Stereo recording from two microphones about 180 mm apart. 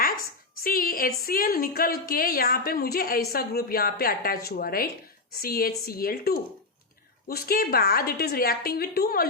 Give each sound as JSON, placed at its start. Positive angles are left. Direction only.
{"t": 0.6, "sound": "a woman's voice", "side_deg": 55}